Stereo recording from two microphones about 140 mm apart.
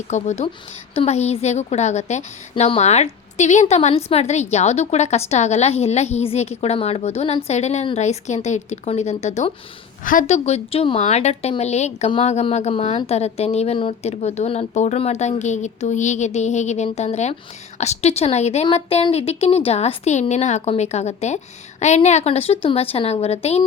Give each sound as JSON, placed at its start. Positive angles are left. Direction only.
{"t": 0.1, "sound": "a woman's voice", "side_deg": 55}
{"t": 10.0, "sound": "a woman's voice", "side_deg": 75}
{"t": 10.2, "sound": "a woman's voice", "side_deg": 50}